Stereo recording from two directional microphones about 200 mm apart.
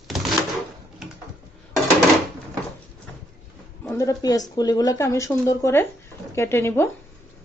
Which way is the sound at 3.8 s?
15° left (ahead or behind).